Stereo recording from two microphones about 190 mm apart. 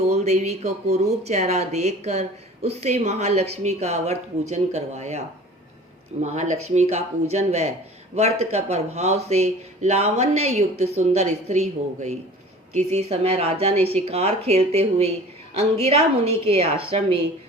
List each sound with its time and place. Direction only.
0.0 s speech: 35° right (ahead or behind)
6.2 s speech: 40° right (ahead or behind)